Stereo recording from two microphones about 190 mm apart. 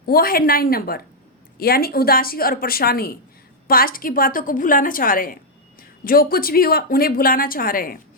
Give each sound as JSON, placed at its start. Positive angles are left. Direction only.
{"t": 0.0, "sound": "speech", "side_deg": 50}